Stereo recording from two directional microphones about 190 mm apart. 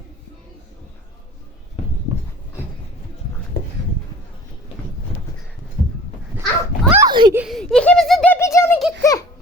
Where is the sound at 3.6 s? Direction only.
55° left (ahead or behind).